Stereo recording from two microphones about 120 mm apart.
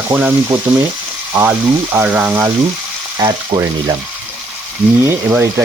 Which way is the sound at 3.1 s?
35° right (ahead or behind).